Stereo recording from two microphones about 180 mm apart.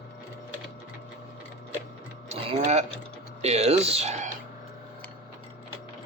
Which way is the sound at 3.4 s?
35° right (ahead or behind).